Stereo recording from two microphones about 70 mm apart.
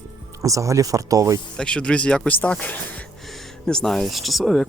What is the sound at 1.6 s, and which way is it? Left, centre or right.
Speech, centre.